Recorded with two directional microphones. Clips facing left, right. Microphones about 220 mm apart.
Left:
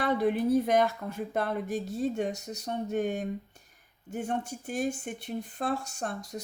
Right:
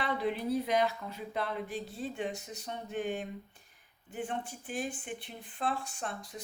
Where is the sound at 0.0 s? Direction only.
45° left (ahead or behind).